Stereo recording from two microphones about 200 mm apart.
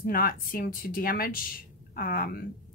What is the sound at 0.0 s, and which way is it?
Speech, 45° left (ahead or behind).